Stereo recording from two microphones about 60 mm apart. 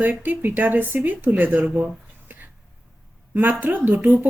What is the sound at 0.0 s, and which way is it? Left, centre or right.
Speech, right.